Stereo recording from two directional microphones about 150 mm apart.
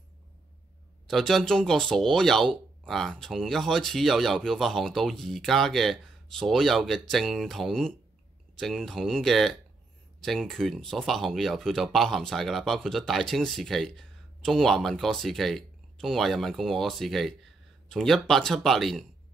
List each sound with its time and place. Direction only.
1.0 s speech: centre (ahead or behind)